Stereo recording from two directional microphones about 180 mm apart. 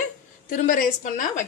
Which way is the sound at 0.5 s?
50° left (ahead or behind).